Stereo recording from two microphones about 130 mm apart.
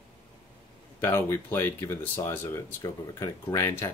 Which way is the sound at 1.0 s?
20° left (ahead or behind).